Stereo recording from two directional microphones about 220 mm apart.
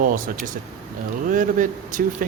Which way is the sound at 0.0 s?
40° right (ahead or behind).